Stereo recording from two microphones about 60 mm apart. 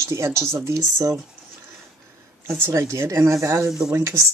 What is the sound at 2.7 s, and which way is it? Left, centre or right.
Speech, right.